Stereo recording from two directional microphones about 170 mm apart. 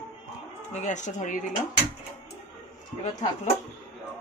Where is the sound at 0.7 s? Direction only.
45° left (ahead or behind).